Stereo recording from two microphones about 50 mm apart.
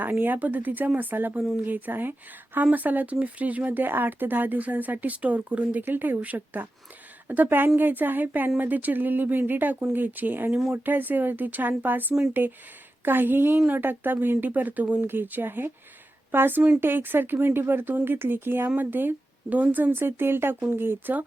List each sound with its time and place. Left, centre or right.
0.0 s speech: right